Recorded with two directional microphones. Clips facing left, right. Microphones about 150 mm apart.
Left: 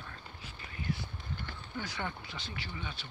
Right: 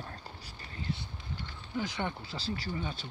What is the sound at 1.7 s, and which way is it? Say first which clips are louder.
Speech: right 5 dB; 20° right (ahead or behind).